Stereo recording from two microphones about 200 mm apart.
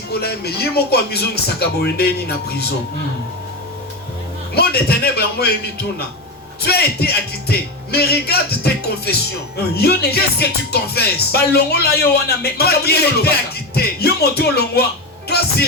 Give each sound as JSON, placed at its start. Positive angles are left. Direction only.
{"t": 0.1, "sound": "music", "side_deg": 50}
{"t": 4.5, "sound": "music", "side_deg": 50}